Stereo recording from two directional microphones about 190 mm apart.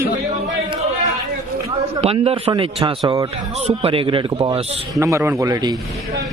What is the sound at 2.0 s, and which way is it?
A man's voice, 30° right (ahead or behind).